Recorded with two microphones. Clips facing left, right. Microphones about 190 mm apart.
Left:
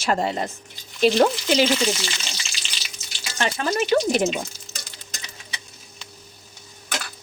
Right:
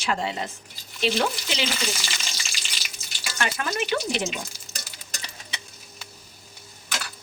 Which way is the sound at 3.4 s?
35° left (ahead or behind).